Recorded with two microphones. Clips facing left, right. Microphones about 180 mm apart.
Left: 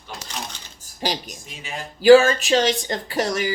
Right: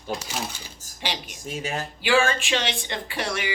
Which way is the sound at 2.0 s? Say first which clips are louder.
Left 11 dB; 40° left (ahead or behind).